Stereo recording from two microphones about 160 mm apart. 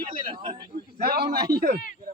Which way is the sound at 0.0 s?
30° right (ahead or behind).